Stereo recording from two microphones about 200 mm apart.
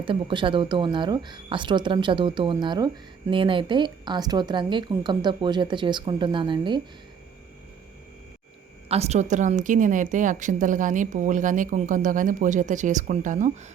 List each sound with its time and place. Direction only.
0.0 s speech: 25° right (ahead or behind)
8.9 s a woman's voice: 30° right (ahead or behind)